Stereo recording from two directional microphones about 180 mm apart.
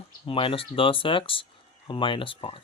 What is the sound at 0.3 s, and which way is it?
Speech, 30° left (ahead or behind).